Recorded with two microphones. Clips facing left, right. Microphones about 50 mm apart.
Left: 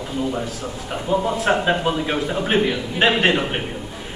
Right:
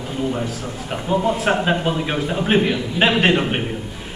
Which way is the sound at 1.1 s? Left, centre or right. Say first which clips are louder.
Even; centre.